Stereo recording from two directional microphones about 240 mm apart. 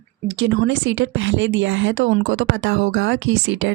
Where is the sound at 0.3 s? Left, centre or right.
Right.